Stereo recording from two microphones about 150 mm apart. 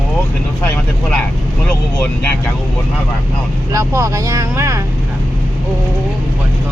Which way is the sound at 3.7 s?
20° right (ahead or behind).